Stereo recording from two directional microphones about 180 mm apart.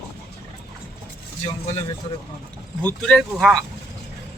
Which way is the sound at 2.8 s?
5° left (ahead or behind).